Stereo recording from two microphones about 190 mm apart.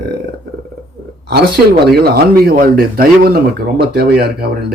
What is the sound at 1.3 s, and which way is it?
Speech, 55° right (ahead or behind).